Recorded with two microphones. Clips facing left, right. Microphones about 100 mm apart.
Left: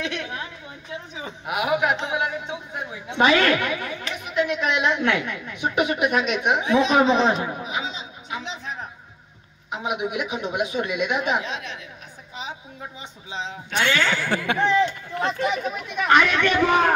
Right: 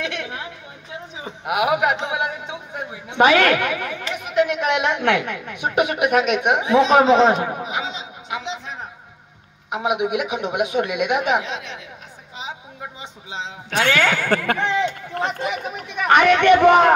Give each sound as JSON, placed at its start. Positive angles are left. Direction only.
{"t": 0.0, "sound": "chatter", "side_deg": -65}
{"t": 1.4, "sound": "a man's voice", "side_deg": -60}
{"t": 7.7, "sound": "a sound", "side_deg": -85}
{"t": 9.7, "sound": "a man's voice", "side_deg": -65}
{"t": 13.7, "sound": "speech", "side_deg": -45}
{"t": 14.6, "sound": "a man's voice", "side_deg": -75}
{"t": 15.5, "sound": "speech", "side_deg": -60}